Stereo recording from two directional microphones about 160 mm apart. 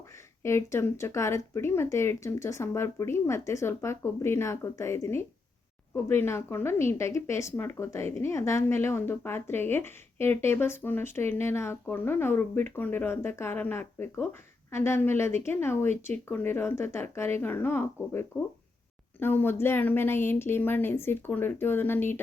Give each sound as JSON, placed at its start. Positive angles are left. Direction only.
{"t": 0.4, "sound": "a woman's voice", "side_deg": 15}